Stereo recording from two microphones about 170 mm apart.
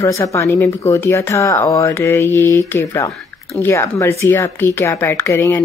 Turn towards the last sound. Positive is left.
turn(degrees=15)  # may be behind; listen again after turning